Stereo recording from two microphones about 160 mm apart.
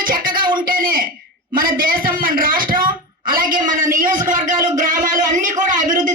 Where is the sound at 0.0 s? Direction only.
60° right (ahead or behind).